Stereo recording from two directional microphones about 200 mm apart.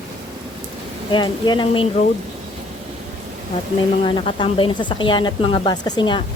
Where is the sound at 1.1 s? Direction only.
20° left (ahead or behind).